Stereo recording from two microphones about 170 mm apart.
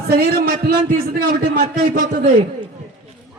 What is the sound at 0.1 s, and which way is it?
Speech, 65° right (ahead or behind).